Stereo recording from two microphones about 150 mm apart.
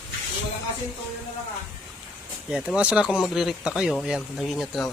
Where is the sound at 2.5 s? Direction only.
5° right (ahead or behind).